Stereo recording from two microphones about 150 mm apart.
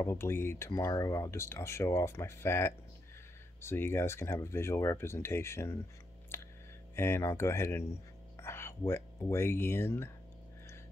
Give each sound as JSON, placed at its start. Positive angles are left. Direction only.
{"t": 0.0, "sound": "speech", "side_deg": 15}
{"t": 6.3, "sound": "a sound", "side_deg": 15}
{"t": 7.0, "sound": "speech", "side_deg": 15}